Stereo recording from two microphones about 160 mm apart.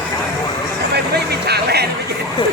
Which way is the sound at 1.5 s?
90° right.